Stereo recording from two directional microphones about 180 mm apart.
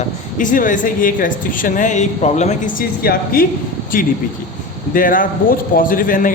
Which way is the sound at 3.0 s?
55° left (ahead or behind).